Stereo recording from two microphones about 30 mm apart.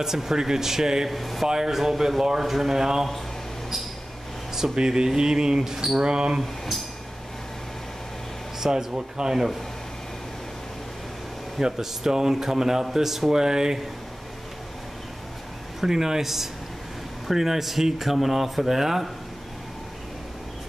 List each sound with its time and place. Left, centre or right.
0.0 s speech: centre
1.0 s speech: centre
1.5 s speech: centre
4.7 s a sound: right
6.4 s speech: centre
8.5 s speech: centre
8.9 s a sound: right
11.6 s speech: centre
13.3 s a sound: right
15.8 s speech: centre